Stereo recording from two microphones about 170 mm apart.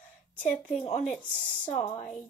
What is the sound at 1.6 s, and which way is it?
Speech, 40° left (ahead or behind).